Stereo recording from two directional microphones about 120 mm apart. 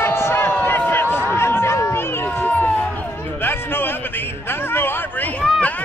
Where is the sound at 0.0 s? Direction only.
20° left (ahead or behind).